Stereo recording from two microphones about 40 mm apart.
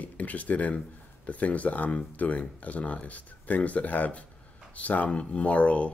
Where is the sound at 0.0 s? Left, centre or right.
Left.